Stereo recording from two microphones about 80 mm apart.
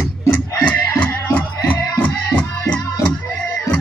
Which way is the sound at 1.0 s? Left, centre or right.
Left.